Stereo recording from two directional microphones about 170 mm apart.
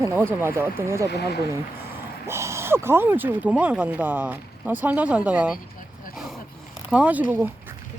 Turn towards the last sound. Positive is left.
turn(degrees=-10)  # may be behind; listen again after turning